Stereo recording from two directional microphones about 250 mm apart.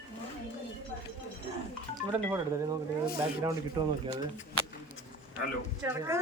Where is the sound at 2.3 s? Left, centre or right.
Centre.